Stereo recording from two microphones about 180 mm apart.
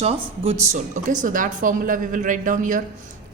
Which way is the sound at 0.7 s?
45° right (ahead or behind).